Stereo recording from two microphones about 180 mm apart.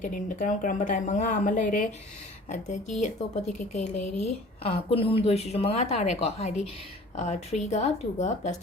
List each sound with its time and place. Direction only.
0.0 s a woman's voice: 45° left (ahead or behind)